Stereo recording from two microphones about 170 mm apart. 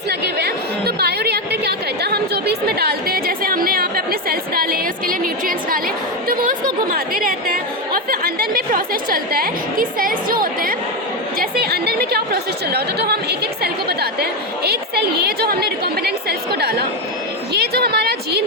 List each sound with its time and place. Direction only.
0.1 s chatter: 70° right (ahead or behind)
6.2 s a sound: 55° right (ahead or behind)
6.9 s a woman's voice: 55° right (ahead or behind); by 18.4 s 75° right (ahead or behind)